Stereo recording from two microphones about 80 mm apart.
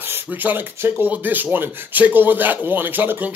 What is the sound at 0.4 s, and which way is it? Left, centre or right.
Speech, centre.